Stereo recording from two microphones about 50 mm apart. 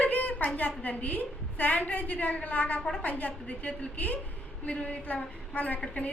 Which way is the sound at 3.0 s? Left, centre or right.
Left.